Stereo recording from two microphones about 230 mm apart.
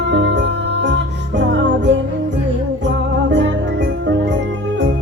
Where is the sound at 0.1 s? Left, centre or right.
Right.